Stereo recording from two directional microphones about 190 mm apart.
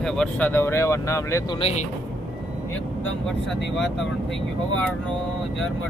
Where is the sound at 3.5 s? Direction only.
Centre (ahead or behind).